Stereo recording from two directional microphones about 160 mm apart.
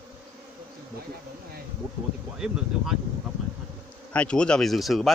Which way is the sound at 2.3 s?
5° right (ahead or behind).